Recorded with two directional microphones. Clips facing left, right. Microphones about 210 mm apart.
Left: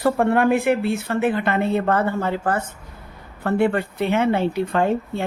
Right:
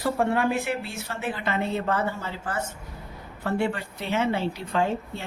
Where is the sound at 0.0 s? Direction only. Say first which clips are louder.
Left 6 dB; 55° left (ahead or behind).